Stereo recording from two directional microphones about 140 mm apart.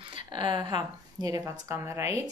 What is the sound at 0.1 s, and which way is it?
Speech, 35° right (ahead or behind).